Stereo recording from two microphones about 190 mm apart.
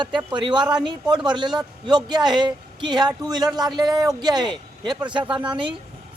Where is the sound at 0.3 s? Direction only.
25° right (ahead or behind).